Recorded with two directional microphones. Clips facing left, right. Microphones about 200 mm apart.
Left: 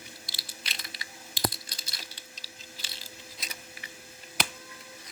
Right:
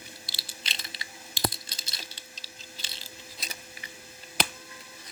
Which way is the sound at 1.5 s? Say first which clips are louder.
Right 1 dB; 25° right (ahead or behind).